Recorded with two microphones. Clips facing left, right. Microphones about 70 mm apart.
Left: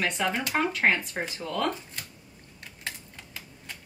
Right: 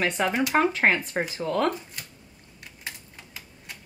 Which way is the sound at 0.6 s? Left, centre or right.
Right.